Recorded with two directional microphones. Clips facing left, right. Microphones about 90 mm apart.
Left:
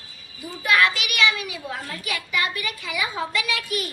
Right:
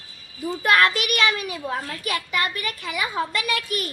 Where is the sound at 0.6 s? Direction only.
45° right (ahead or behind).